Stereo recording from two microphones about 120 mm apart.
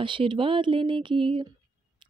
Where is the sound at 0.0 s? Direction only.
45° right (ahead or behind).